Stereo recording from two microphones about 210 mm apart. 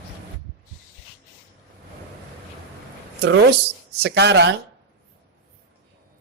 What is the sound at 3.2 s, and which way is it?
Speech, 55° right (ahead or behind).